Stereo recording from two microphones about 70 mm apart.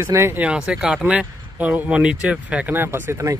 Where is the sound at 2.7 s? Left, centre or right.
Right.